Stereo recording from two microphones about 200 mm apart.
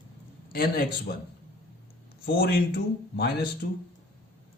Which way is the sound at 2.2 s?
50° left (ahead or behind).